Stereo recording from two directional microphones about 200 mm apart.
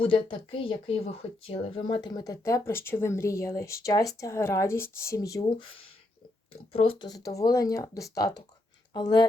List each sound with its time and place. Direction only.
0.6 s speech: 30° left (ahead or behind)